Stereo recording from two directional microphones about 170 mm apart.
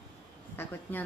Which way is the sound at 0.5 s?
10° left (ahead or behind).